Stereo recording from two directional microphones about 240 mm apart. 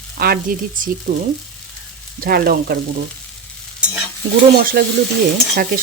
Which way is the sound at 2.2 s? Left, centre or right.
Right.